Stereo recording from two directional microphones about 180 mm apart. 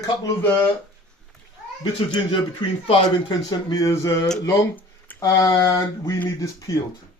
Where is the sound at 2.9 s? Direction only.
20° left (ahead or behind).